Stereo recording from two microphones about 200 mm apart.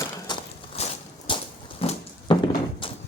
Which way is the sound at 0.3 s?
25° left (ahead or behind).